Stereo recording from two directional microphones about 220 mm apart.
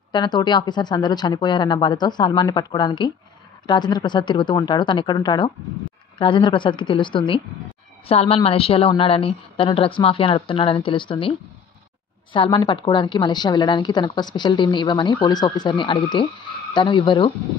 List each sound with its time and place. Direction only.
0.1 s a woman's voice: 20° left (ahead or behind)